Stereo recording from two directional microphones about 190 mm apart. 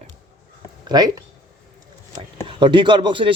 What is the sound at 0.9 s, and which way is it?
Speech, 20° right (ahead or behind).